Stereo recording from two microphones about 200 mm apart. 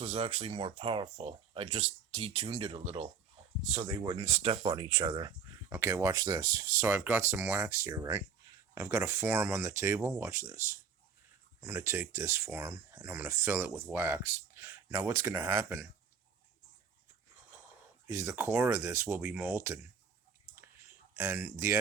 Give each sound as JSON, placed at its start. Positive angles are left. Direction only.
{"t": 0.0, "sound": "speech", "side_deg": -30}
{"t": 5.6, "sound": "speech", "side_deg": -15}
{"t": 11.6, "sound": "speech", "side_deg": -10}
{"t": 18.1, "sound": "speech", "side_deg": -15}
{"t": 21.2, "sound": "speech", "side_deg": -10}